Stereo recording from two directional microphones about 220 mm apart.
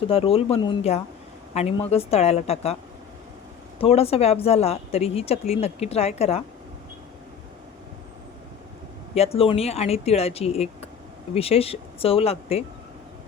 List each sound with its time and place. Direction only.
0.1 s a woman's voice: 25° left (ahead or behind)
3.8 s a woman's voice: 25° left (ahead or behind)
9.1 s a woman's voice: 25° left (ahead or behind)